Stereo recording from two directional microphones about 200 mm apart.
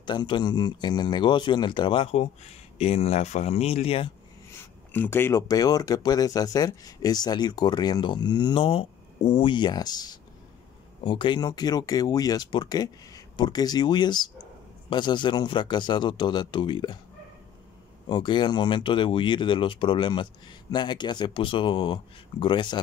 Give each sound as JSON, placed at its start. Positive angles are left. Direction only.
{"t": 0.0, "sound": "speech", "side_deg": 20}
{"t": 4.5, "sound": "speech", "side_deg": 10}
{"t": 18.0, "sound": "speech", "side_deg": 25}